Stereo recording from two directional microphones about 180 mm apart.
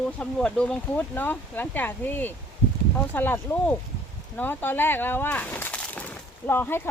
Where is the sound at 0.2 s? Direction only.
5° left (ahead or behind).